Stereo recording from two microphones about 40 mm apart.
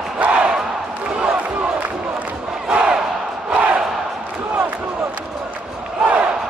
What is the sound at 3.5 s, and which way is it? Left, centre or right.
Crowd, right.